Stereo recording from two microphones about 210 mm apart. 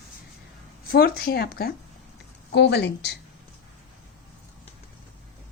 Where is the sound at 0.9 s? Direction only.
45° left (ahead or behind).